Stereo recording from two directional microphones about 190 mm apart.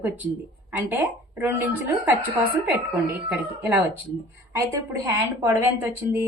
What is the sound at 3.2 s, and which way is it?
A woman's voice, 10° right (ahead or behind).